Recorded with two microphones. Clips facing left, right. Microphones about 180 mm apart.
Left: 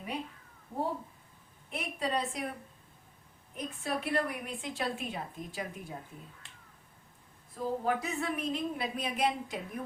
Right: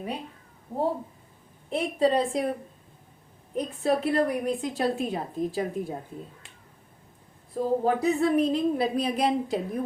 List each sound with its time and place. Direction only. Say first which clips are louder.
1.7 s a woman's voice: right 11 dB; 30° right (ahead or behind)
7.5 s a woman's voice: right 7 dB; 35° right (ahead or behind)